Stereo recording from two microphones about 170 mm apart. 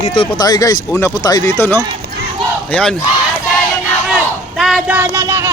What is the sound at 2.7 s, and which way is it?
Battle cry, 5° left (ahead or behind).